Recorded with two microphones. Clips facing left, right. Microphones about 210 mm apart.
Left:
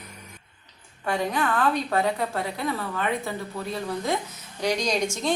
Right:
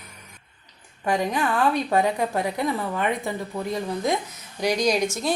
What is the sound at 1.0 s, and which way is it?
A woman's voice, 15° right (ahead or behind).